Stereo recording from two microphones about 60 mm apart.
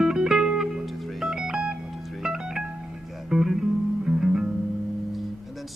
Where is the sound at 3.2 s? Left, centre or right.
Centre.